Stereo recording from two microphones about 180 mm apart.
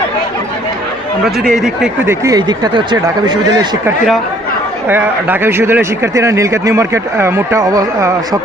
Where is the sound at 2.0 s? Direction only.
20° right (ahead or behind).